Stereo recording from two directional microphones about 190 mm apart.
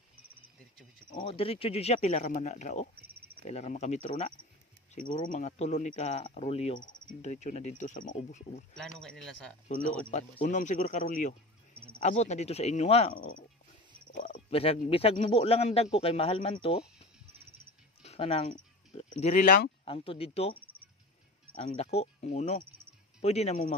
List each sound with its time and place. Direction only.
1.1 s speech: 30° left (ahead or behind)
8.7 s speech: 5° left (ahead or behind)
10.4 s speech: 40° left (ahead or behind)
11.7 s a sound: 30° right (ahead or behind)
12.0 s speech: 35° left (ahead or behind)
19.8 s speech: 30° left (ahead or behind)
21.7 s speech: 35° left (ahead or behind)